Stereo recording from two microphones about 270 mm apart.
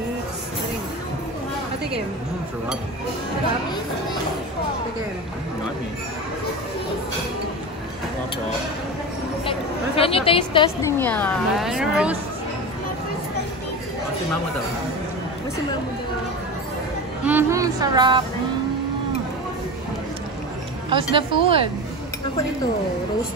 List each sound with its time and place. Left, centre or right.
9.5 s a woman's voice: left; by 12.2 s centre
17.2 s speech: centre
20.9 s a woman's voice: centre